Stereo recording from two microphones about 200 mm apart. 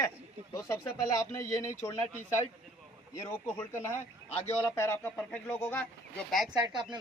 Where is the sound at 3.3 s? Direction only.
10° left (ahead or behind).